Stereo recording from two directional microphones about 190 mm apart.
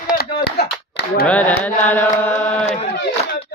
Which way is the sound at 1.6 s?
10° left (ahead or behind).